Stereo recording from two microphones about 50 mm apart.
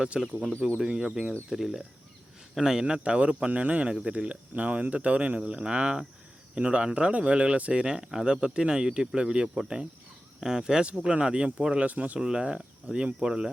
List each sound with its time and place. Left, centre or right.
0.1 s speech: right
11.8 s speech: right
12.2 s speech: centre